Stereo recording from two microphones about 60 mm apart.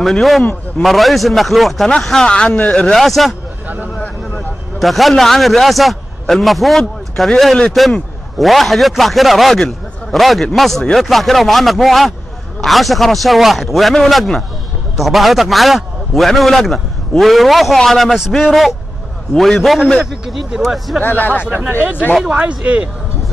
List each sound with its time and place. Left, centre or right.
0.0 s a man's voice: centre
3.0 s a man's voice: centre
3.6 s a sound: right
4.4 s a man's voice: centre
21.0 s speech: left
21.5 s speech: right
22.4 s speech: right